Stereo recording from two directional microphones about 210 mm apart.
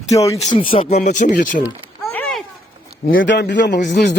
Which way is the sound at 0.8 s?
30° left (ahead or behind).